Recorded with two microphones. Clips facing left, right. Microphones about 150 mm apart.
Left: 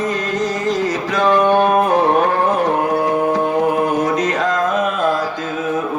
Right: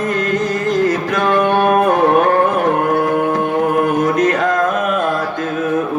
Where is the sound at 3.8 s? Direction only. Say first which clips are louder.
Right 3 dB; 55° right (ahead or behind).